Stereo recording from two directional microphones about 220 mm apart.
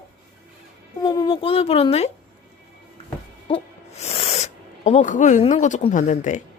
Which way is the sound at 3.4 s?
25° left (ahead or behind).